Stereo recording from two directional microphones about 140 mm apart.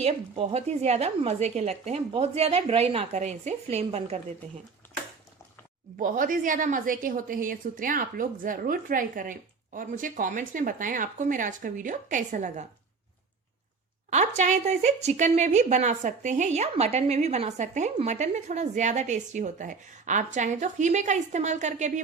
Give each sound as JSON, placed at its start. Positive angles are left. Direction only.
{"t": 0.3, "sound": "a woman's voice", "side_deg": -50}
{"t": 6.0, "sound": "a woman's voice", "side_deg": -70}
{"t": 14.1, "sound": "a woman's voice", "side_deg": -55}